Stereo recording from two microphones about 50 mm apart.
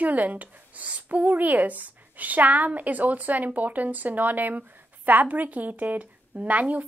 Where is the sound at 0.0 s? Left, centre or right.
Right.